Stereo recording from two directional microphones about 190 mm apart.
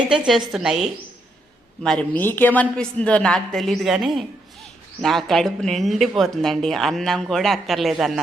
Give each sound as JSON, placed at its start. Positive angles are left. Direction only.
{"t": 0.1, "sound": "speech", "side_deg": 0}